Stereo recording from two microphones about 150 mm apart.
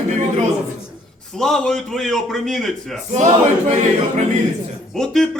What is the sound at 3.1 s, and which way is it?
Speech, 50° right (ahead or behind).